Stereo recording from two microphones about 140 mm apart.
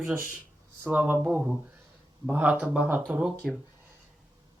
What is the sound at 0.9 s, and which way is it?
Speech, 15° right (ahead or behind).